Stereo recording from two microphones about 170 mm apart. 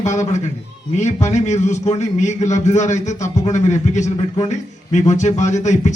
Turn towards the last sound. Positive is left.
turn(degrees=45)  # may be behind; listen again after turning